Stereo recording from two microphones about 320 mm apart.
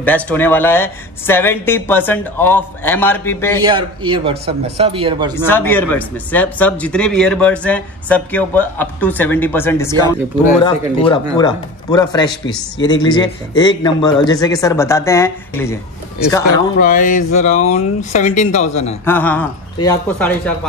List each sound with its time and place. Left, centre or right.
0.0 s speech: centre
3.6 s speech: centre
5.3 s speech: centre
11.0 s speech: centre
16.7 s speech: left
19.0 s speech: centre